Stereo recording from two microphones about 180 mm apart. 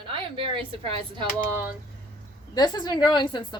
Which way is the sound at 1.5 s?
10° right (ahead or behind).